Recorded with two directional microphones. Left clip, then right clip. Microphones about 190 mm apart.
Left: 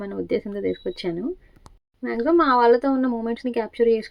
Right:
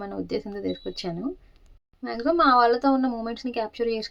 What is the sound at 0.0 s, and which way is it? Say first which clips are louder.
A woman's voice: left 5 dB; 15° left (ahead or behind).